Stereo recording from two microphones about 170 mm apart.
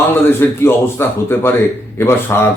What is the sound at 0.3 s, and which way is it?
Speech, 15° left (ahead or behind).